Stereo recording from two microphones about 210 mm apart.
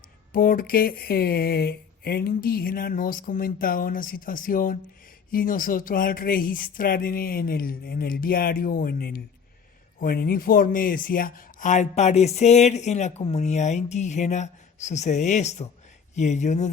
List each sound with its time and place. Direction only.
0.3 s speech: 40° left (ahead or behind)